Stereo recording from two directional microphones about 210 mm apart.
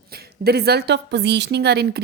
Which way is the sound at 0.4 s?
50° right (ahead or behind).